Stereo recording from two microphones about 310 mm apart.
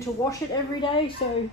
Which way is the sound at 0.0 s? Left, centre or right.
Centre.